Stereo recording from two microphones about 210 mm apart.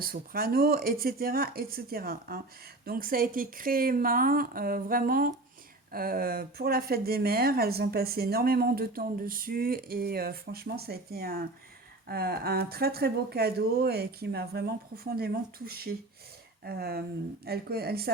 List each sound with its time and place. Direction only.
0.0 s speech: 45° right (ahead or behind)